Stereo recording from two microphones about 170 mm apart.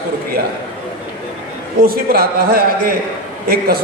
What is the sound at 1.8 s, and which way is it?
A man's voice, 60° right (ahead or behind).